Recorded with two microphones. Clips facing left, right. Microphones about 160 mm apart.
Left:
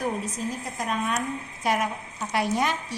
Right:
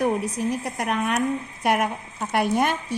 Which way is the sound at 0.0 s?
65° right (ahead or behind).